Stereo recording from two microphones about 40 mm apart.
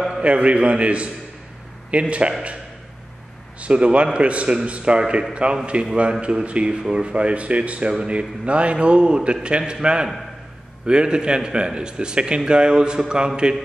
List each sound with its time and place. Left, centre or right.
0.2 s a man's voice: right
3.6 s a man's voice: right